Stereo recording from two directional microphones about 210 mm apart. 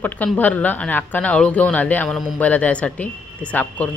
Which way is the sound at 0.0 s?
10° left (ahead or behind).